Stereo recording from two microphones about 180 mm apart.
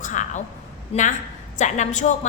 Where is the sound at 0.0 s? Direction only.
45° left (ahead or behind).